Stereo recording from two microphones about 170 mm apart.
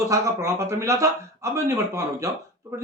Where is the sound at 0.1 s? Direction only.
15° right (ahead or behind).